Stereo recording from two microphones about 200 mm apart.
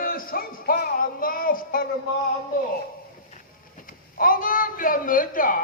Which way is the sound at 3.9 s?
45° left (ahead or behind).